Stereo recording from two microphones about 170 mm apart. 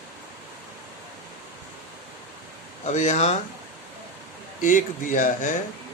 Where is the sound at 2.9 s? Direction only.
45° left (ahead or behind).